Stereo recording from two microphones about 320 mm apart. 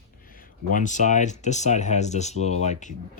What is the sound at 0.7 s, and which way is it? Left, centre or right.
Speech, left.